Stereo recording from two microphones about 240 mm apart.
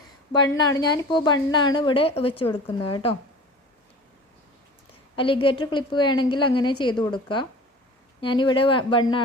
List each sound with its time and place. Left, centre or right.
0.3 s a woman's voice: centre
5.1 s a woman's voice: left